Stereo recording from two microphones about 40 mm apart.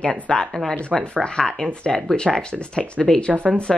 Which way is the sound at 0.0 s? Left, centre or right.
Left.